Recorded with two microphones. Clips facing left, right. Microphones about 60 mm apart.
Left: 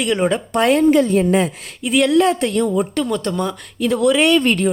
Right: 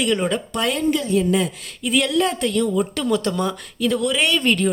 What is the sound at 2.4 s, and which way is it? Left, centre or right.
Speech, left.